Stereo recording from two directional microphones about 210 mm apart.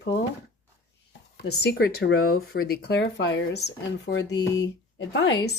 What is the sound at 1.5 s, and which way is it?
A woman's voice, 50° left (ahead or behind).